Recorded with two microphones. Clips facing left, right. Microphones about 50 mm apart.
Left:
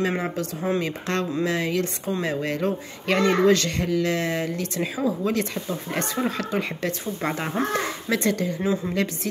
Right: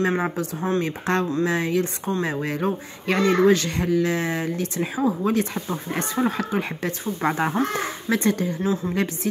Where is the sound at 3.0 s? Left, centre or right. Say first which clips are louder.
Right 1 dB; left.